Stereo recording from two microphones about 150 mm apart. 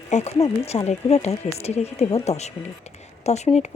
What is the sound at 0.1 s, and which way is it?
Speech, 50° left (ahead or behind).